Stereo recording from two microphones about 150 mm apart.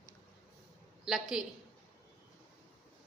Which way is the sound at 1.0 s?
Centre (ahead or behind).